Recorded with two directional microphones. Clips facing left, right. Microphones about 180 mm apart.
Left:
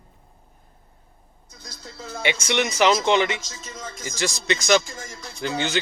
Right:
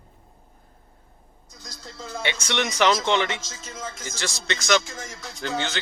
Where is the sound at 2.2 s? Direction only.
10° left (ahead or behind).